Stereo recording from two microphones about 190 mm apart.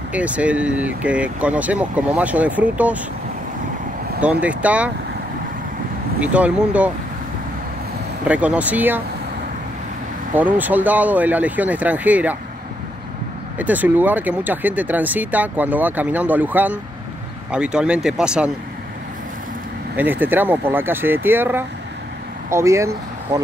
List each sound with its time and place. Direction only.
0.1 s speech: 5° right (ahead or behind)
4.2 s speech: 5° right (ahead or behind)
6.2 s speech: 5° right (ahead or behind)
8.3 s speech: 5° right (ahead or behind)
10.3 s speech: 10° right (ahead or behind)
13.6 s speech: 10° right (ahead or behind)
20.0 s speech: 10° right (ahead or behind)